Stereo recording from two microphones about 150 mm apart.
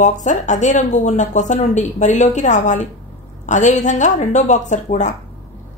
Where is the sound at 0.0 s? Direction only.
55° left (ahead or behind).